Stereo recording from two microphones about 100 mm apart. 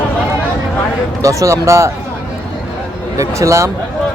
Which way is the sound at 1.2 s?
35° right (ahead or behind).